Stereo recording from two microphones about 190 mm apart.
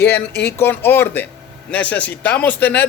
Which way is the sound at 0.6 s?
10° left (ahead or behind).